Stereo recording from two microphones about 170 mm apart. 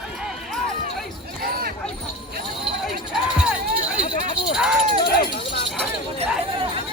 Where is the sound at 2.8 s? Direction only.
5° right (ahead or behind).